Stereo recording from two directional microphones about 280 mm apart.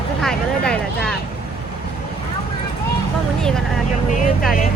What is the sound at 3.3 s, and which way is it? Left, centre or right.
Speech, centre.